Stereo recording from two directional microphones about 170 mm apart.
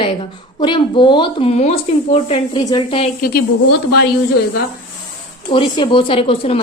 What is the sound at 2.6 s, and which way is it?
Speech, 25° left (ahead or behind).